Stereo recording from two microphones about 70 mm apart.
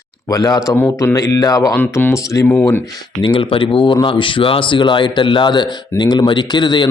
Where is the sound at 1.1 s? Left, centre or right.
Left.